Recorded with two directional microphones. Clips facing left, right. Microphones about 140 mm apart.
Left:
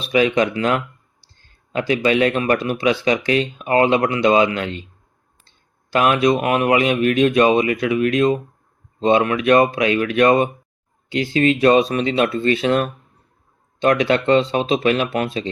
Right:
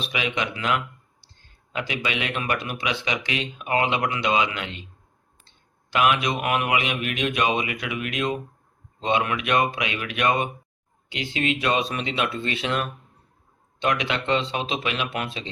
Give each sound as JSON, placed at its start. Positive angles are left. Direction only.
{"t": 0.0, "sound": "speech", "side_deg": 40}